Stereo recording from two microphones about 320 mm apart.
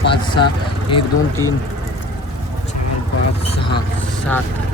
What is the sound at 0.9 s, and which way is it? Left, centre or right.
Speech, centre.